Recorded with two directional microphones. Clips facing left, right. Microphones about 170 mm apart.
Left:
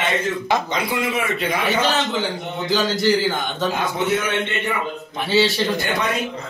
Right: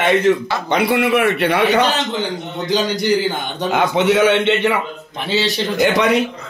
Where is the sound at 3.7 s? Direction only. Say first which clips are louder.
Right 7 dB; 80° right.